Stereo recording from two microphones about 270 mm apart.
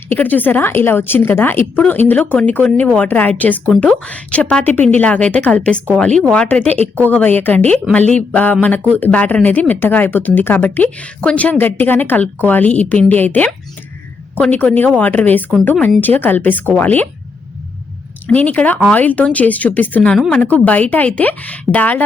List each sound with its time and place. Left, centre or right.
0.1 s speech: centre
18.3 s speech: centre